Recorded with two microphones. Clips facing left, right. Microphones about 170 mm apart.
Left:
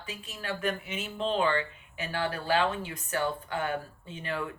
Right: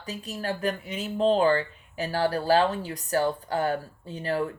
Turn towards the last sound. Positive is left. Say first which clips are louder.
# right 7 dB
turn(degrees=-35)  # may be behind; listen again after turning